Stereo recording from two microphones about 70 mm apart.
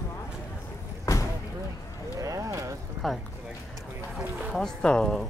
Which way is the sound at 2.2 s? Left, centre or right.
Right.